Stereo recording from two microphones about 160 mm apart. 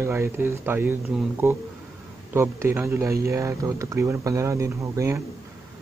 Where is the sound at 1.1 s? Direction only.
5° right (ahead or behind).